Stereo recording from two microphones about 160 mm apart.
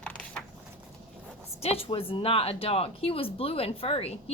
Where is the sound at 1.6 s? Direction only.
35° left (ahead or behind).